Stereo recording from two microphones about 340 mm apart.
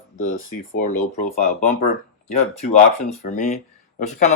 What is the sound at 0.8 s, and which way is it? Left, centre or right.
Speech, left.